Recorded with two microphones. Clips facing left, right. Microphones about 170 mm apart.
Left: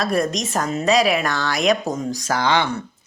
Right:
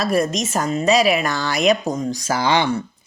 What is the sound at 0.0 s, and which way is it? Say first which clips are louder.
Speech: right 2 dB; centre (ahead or behind).